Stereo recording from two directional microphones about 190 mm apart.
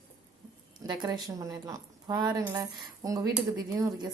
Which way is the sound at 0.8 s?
20° right (ahead or behind).